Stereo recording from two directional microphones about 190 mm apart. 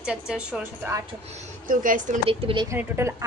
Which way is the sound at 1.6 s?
45° right (ahead or behind).